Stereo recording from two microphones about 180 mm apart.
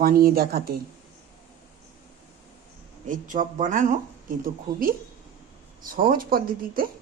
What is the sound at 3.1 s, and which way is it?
Speech, 45° right (ahead or behind).